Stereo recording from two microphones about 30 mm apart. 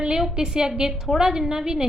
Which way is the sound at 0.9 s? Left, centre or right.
Centre.